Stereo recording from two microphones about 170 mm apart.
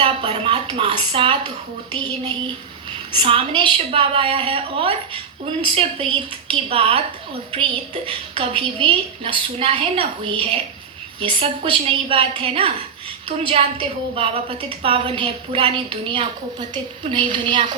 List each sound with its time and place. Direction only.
0.0 s a woman's voice: 30° right (ahead or behind)
3.1 s a woman's voice: 30° right (ahead or behind)